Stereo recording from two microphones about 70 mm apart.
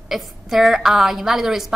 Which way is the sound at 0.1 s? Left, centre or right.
Centre.